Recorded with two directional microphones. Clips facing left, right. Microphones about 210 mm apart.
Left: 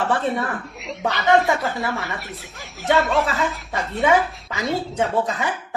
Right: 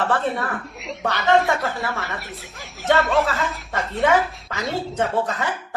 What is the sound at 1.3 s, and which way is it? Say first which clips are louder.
Speech: left 1 dB; centre (ahead or behind).